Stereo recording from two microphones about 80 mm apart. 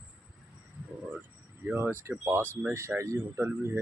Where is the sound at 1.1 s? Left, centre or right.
Right.